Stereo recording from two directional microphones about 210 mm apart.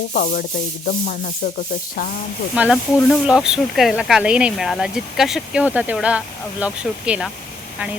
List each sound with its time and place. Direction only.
0.1 s sanding: 45° left (ahead or behind)
2.6 s speech: 5° right (ahead or behind)